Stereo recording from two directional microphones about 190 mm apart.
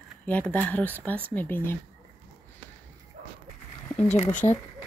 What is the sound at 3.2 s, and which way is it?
Dog, 45° right (ahead or behind).